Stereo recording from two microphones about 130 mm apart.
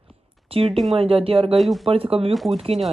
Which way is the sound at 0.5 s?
45° right (ahead or behind).